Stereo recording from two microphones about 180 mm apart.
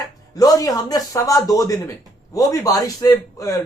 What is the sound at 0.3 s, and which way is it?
Speech, 20° left (ahead or behind).